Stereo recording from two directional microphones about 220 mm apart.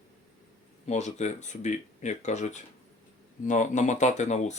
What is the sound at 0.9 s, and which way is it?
Speech, 30° left (ahead or behind).